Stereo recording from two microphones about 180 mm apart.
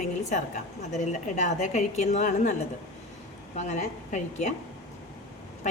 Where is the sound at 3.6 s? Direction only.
40° left (ahead or behind).